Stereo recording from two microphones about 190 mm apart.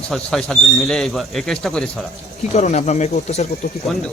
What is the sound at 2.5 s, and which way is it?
Speech, 35° left (ahead or behind).